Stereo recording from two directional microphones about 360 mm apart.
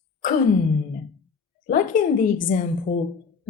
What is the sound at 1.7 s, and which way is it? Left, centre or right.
Speech, left.